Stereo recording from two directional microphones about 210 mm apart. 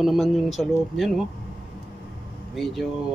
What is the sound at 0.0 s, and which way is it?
Speech, centre (ahead or behind).